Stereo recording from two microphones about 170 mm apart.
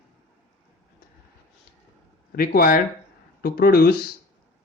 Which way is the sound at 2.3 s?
60° left (ahead or behind).